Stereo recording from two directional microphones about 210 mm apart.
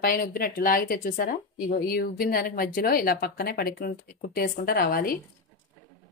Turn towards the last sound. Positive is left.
turn(degrees=45)  # may be behind; listen again after turning